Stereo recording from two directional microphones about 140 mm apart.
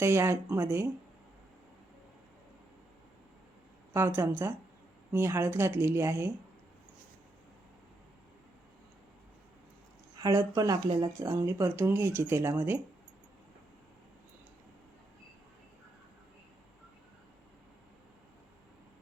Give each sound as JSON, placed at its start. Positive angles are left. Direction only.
{"t": 0.0, "sound": "speech", "side_deg": -20}
{"t": 3.9, "sound": "speech", "side_deg": -20}
{"t": 10.2, "sound": "speech", "side_deg": -25}